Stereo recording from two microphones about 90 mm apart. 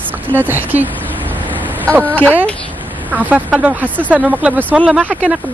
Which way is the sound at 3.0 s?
15° right (ahead or behind).